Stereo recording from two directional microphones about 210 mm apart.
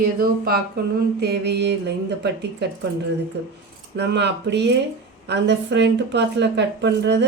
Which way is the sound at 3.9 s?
55° right (ahead or behind).